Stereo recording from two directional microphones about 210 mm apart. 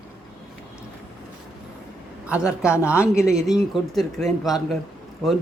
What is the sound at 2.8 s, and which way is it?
Speech, 10° left (ahead or behind).